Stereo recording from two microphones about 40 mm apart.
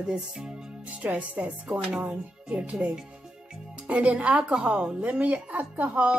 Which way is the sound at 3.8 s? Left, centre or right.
Right.